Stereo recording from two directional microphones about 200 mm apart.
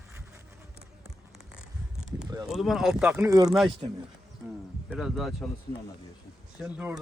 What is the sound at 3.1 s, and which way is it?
Speech, 15° right (ahead or behind).